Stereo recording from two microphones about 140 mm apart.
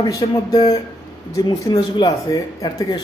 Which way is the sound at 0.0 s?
30° left (ahead or behind).